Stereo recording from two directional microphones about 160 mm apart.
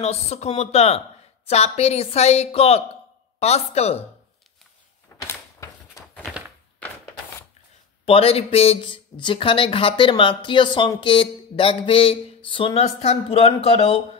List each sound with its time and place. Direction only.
0.0 s speech: 40° left (ahead or behind)
5.2 s a sound: 15° left (ahead or behind)
8.0 s speech: 35° left (ahead or behind)